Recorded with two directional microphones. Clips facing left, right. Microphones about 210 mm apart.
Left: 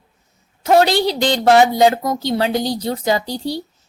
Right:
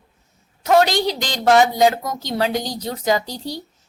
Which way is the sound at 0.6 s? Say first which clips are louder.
Left 2 dB; 30° left (ahead or behind).